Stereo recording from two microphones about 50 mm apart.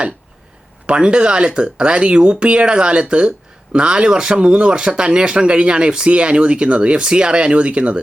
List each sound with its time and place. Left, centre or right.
0.9 s speech: right